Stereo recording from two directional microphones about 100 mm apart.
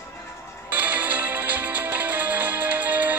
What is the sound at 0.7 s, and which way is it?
Music, 15° right (ahead or behind).